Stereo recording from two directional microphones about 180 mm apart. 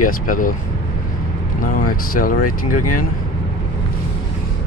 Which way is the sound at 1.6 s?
50° left (ahead or behind).